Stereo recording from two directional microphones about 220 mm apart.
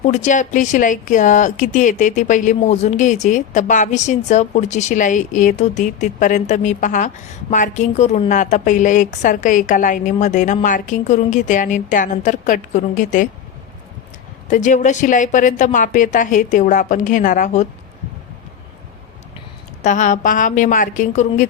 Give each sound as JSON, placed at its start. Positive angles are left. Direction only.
{"t": 0.0, "sound": "speech", "side_deg": 30}
{"t": 14.4, "sound": "speech", "side_deg": 35}
{"t": 19.8, "sound": "speech", "side_deg": 35}